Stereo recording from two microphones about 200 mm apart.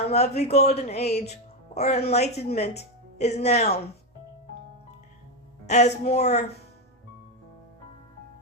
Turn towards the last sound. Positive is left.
turn(degrees=35)  # may be behind; listen again after turning